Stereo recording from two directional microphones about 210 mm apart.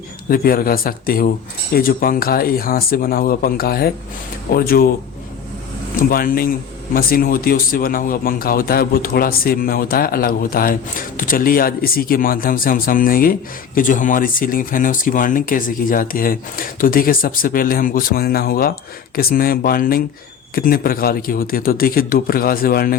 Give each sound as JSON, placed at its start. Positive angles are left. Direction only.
{"t": 0.3, "sound": "speech", "side_deg": 45}
{"t": 6.0, "sound": "speech", "side_deg": 45}